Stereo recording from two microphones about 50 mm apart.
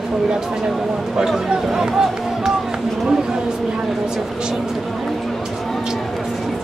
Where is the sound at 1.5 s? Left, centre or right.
Centre.